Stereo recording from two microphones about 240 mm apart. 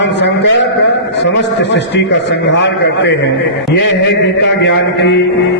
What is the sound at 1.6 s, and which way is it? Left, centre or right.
A man's voice, left.